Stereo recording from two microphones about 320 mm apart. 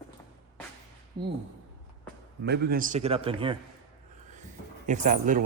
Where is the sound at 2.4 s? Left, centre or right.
Right.